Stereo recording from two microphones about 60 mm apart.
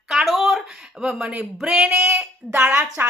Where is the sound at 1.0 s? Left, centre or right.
Centre.